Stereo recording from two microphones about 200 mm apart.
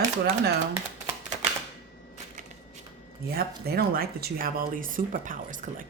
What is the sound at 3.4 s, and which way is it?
A woman's voice, 50° right (ahead or behind).